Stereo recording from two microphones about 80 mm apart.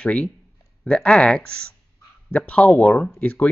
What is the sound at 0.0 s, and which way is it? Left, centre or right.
Speech, centre.